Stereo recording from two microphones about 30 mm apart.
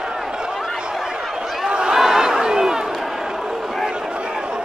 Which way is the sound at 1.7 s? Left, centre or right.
Right.